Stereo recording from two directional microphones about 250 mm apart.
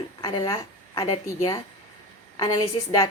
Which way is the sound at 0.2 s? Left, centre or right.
Left.